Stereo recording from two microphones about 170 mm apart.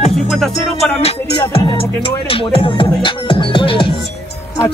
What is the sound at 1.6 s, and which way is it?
Speech, 30° left (ahead or behind).